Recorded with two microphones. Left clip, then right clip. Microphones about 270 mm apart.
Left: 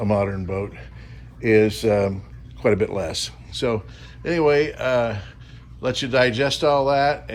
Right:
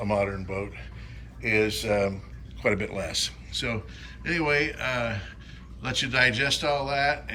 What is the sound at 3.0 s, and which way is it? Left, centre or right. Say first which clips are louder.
Speech: left 3 dB; left.